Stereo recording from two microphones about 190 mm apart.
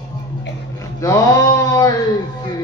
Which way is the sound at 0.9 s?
15° left (ahead or behind).